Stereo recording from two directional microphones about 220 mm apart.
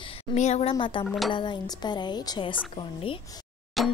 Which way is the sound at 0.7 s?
20° left (ahead or behind).